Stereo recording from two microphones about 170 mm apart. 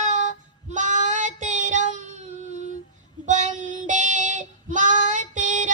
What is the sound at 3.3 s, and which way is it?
Child singing, 45° right (ahead or behind).